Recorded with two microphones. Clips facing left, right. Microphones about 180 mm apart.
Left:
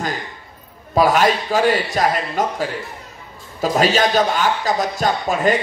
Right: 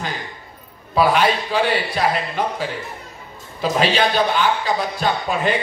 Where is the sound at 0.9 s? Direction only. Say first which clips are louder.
Left 2 dB; 45° left (ahead or behind).